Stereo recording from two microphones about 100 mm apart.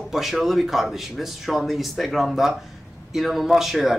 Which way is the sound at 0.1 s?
Centre (ahead or behind).